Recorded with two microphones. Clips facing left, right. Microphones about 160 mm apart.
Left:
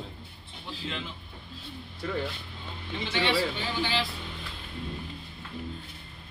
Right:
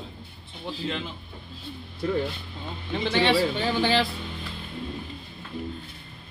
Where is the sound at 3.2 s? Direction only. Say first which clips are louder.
Right 4 dB; 55° right (ahead or behind).